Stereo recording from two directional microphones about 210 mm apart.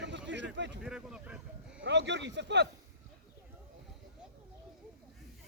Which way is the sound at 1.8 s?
55° right (ahead or behind).